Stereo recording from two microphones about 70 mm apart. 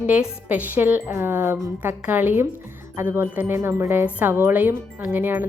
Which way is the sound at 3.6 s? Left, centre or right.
Right.